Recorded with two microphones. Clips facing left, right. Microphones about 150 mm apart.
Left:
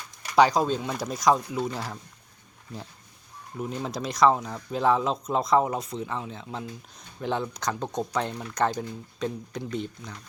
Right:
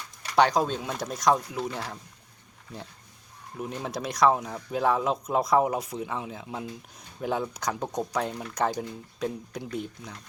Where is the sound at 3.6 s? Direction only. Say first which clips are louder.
Left 1 dB; 5° right (ahead or behind).